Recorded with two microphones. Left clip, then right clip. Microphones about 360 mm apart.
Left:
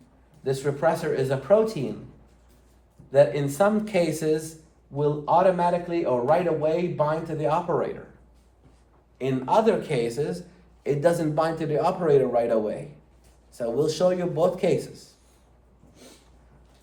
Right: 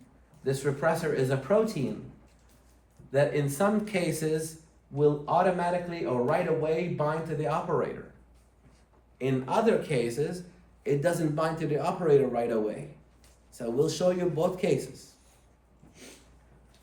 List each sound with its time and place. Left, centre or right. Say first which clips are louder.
0.4 s a man's voice: left 4 dB; centre
3.1 s a man's voice: left 6 dB; centre
9.1 s a man's voice: left 6 dB; centre